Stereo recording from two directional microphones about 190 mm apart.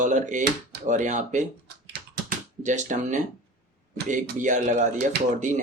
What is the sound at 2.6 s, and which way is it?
Speech, 40° right (ahead or behind).